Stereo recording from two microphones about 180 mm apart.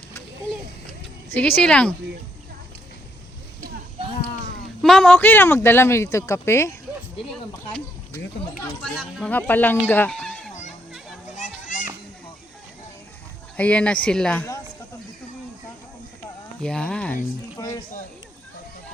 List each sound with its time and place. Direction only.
1.3 s speech: 10° left (ahead or behind)
4.8 s speech: 5° left (ahead or behind)
8.8 s speech: centre (ahead or behind)
11.3 s children playing: 45° left (ahead or behind)
13.6 s speech: 5° left (ahead or behind)
16.6 s speech: 5° left (ahead or behind)
17.6 s speech: 20° left (ahead or behind)